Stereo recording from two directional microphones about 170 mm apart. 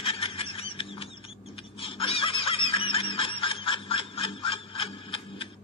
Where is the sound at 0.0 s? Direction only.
35° left (ahead or behind).